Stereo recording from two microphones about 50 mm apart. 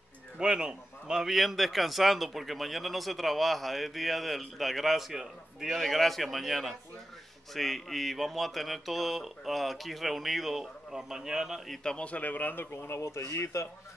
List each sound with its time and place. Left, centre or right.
0.4 s a man's voice: centre
11.8 s a man's voice: centre
12.1 s speech: left
13.0 s speech: left